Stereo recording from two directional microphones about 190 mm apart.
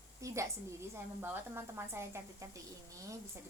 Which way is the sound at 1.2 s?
10° right (ahead or behind).